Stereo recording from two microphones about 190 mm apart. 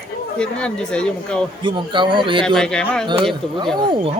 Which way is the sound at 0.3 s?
5° left (ahead or behind).